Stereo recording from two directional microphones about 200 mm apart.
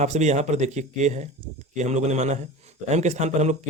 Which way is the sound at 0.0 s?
35° right (ahead or behind).